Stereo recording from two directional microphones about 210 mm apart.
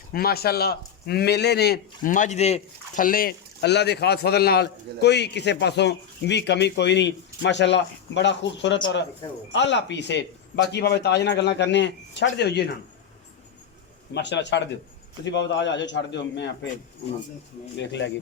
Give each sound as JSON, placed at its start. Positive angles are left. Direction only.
{"t": 0.1, "sound": "a man's voice", "side_deg": 45}
{"t": 14.1, "sound": "speech", "side_deg": 55}
{"t": 17.7, "sound": "speech", "side_deg": 55}